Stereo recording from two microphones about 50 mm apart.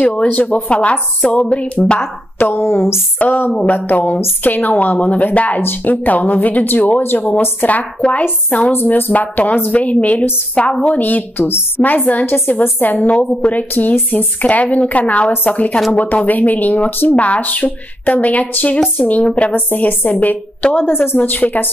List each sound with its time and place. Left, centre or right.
0.0 s a sound: left
2.0 s speech: left
3.2 s speech: left
8.7 s speech: left
10.5 s a sound: left
11.0 s speech: left
11.4 s speech: left
11.8 s speech: left
19.2 s a sound: left
19.5 s speech: left
20.8 s speech: left